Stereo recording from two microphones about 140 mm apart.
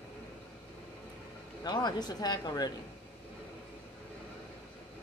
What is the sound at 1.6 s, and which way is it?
Speech, 30° left (ahead or behind).